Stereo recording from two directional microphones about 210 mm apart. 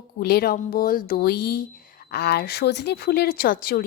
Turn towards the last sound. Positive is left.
turn(degrees=45)  # may be behind; listen again after turning